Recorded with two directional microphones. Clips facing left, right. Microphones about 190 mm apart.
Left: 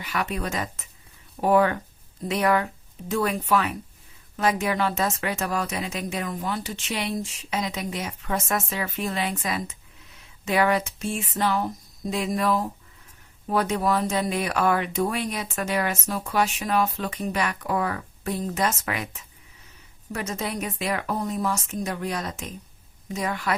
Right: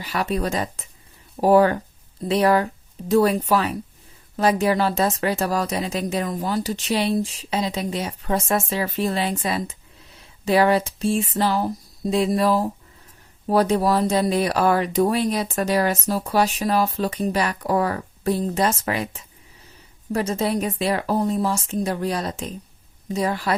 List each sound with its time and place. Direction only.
0.0 s speech: 35° right (ahead or behind)